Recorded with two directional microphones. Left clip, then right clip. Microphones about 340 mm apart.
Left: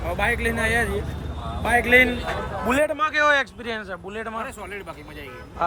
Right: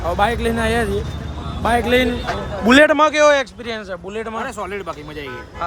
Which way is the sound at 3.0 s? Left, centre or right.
Centre.